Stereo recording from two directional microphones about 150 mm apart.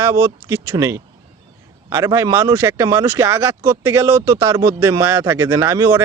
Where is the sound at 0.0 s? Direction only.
20° right (ahead or behind).